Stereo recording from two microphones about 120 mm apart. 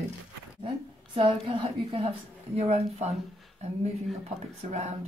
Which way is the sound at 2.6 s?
65° right (ahead or behind).